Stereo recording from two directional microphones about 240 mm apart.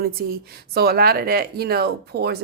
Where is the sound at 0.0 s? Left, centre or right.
Right.